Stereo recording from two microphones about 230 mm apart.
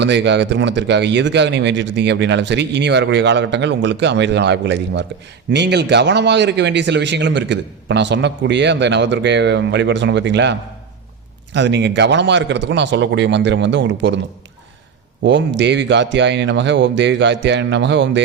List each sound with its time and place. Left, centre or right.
0.0 s speech: right
15.2 s speech: right